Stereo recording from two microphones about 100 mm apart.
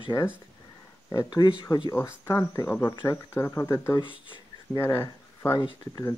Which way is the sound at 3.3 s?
30° left (ahead or behind).